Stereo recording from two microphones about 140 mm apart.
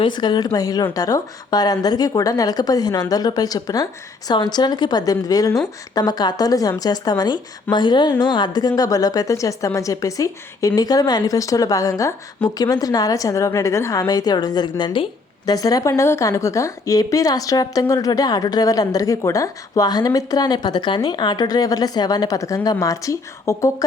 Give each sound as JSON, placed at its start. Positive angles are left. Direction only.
{"t": 0.0, "sound": "a woman's voice", "side_deg": 30}